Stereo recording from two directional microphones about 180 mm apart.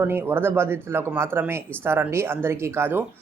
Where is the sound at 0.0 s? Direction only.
10° right (ahead or behind).